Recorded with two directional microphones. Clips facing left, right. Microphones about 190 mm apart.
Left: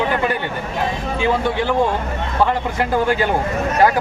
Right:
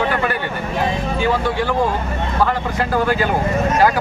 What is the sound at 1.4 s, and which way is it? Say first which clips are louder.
Speech: left 1 dB; 20° left (ahead or behind).